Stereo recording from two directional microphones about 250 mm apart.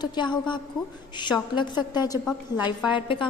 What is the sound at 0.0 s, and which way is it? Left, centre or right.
A woman's voice, centre.